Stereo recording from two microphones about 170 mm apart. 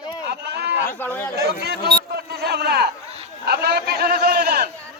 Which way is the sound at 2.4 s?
70° right (ahead or behind).